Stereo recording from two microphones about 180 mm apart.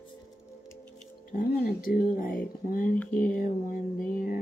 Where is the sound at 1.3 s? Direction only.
50° left (ahead or behind).